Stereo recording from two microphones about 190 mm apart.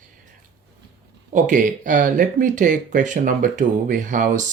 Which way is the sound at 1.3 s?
40° right (ahead or behind).